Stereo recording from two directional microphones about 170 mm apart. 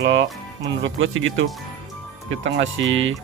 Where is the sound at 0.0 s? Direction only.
90° right.